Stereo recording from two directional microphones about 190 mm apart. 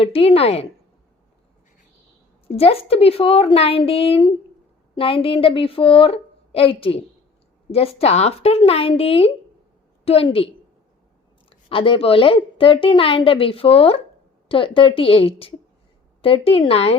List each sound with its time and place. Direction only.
0.0 s a woman's voice: 30° left (ahead or behind)
2.5 s a woman's voice: 30° left (ahead or behind)